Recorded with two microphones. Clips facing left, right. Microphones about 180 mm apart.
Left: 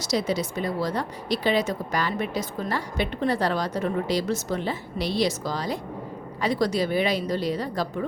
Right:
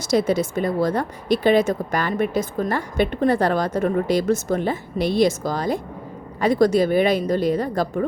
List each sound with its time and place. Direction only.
0.0 s a woman's voice: 50° right (ahead or behind)